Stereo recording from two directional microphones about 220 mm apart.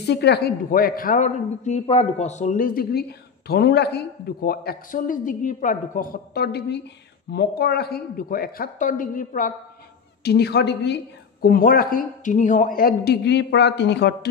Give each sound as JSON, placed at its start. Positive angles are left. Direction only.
{"t": 0.0, "sound": "a woman's voice", "side_deg": 50}
{"t": 10.2, "sound": "a man's voice", "side_deg": 50}